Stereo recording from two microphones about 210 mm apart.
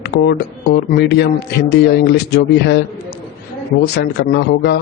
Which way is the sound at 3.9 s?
50° left (ahead or behind).